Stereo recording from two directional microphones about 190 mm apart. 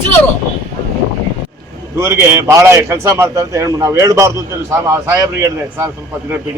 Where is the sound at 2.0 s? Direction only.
15° right (ahead or behind).